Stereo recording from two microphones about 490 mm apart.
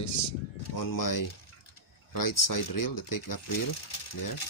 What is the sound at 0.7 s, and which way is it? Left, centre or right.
Speech, left.